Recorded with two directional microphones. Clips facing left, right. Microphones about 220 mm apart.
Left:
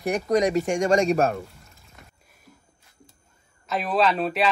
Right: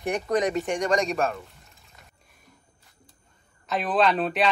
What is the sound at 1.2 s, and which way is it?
Speech, 45° left (ahead or behind).